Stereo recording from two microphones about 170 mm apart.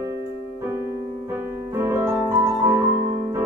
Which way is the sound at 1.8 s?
15° right (ahead or behind).